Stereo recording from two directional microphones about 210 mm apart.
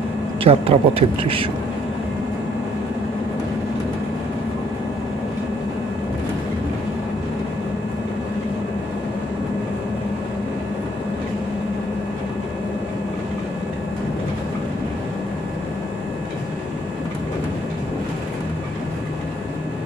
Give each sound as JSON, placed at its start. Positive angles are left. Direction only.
{"t": 0.4, "sound": "a man's voice", "side_deg": -30}